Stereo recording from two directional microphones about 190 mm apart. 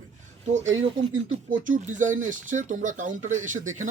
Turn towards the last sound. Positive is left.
turn(degrees=-40)  # may be behind; listen again after turning